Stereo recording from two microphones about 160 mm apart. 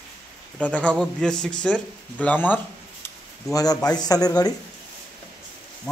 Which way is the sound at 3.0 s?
20° left (ahead or behind).